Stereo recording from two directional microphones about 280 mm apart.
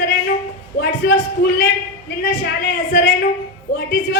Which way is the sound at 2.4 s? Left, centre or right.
Left.